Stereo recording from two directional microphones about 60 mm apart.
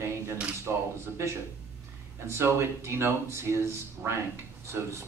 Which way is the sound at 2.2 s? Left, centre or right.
Right.